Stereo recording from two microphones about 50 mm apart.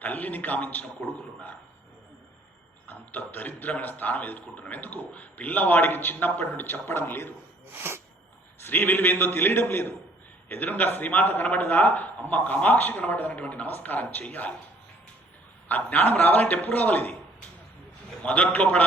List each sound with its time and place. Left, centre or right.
0.0 s a man's voice: left
2.9 s a man's voice: left
7.7 s speech: right
8.6 s a man's voice: left
13.7 s a man's voice: left
15.7 s a man's voice: left
18.2 s a man's voice: left